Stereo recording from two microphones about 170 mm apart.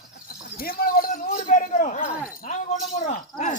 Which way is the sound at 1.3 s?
45° left (ahead or behind).